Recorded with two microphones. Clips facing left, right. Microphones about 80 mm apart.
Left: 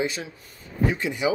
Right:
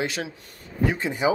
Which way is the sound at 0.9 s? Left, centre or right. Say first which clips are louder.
Right 1 dB; right.